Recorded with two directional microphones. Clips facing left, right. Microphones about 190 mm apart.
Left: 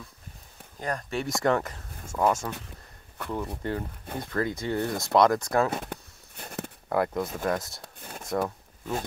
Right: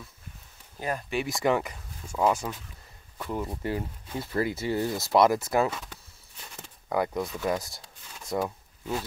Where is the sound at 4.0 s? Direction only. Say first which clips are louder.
Even; 55° left (ahead or behind).